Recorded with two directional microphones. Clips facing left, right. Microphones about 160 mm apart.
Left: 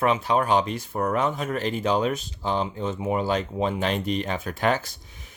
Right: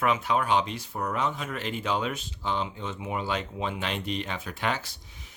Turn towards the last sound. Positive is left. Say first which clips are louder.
# left 2 dB
turn(degrees=45)  # may be behind; listen again after turning